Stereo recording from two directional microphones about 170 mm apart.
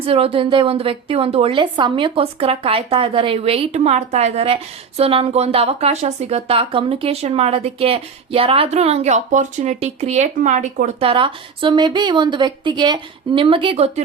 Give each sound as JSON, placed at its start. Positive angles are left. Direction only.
{"t": 0.0, "sound": "speech", "side_deg": -35}